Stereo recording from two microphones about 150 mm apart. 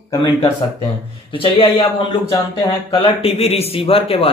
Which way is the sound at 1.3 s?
35° left (ahead or behind).